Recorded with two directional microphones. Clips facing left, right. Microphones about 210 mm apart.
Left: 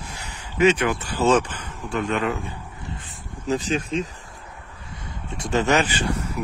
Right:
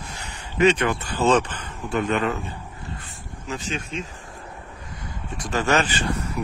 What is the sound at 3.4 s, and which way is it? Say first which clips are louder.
Speech: left 7 dB; 35° left (ahead or behind).